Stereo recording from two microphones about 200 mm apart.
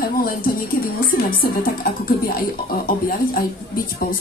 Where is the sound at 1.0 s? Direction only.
45° left (ahead or behind).